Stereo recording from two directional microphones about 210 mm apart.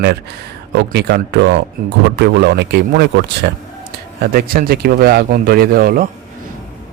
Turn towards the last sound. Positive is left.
turn(degrees=-45)  # may be behind; listen again after turning